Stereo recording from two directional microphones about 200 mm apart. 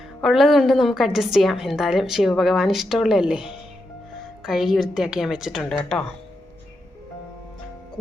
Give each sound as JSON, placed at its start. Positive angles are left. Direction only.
{"t": 0.2, "sound": "a woman's voice", "side_deg": 0}